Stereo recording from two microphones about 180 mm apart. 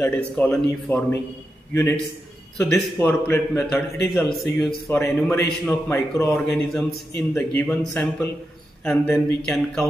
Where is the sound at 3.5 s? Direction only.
Centre (ahead or behind).